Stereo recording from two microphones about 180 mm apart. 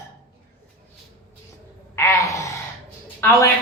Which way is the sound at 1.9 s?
15° left (ahead or behind).